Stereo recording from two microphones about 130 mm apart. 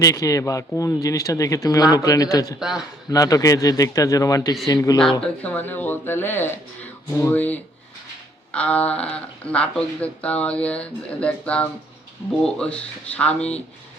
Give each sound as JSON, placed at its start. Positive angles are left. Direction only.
{"t": 0.0, "sound": "speech", "side_deg": 25}
{"t": 2.6, "sound": "a man's voice", "side_deg": -5}
{"t": 3.1, "sound": "speech", "side_deg": 25}
{"t": 5.2, "sound": "speech", "side_deg": 10}